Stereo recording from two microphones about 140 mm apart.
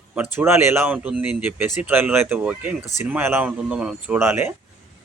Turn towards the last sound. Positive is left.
turn(degrees=-15)  # may be behind; listen again after turning